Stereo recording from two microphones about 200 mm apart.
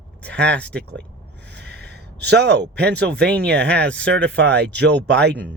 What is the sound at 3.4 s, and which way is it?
Speech, 60° right (ahead or behind).